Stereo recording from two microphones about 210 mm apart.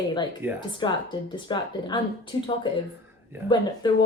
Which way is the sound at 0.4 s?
10° right (ahead or behind).